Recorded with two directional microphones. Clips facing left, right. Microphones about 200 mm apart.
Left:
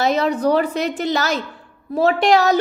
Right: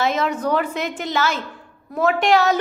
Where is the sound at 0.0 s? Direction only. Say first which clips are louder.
Left 4 dB; 35° left (ahead or behind).